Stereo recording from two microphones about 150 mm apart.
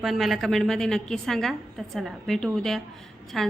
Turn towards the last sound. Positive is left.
turn(degrees=0)  # may be behind; listen again after turning